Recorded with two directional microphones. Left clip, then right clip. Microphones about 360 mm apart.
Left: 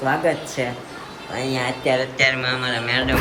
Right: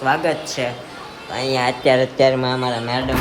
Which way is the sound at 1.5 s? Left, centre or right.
Right.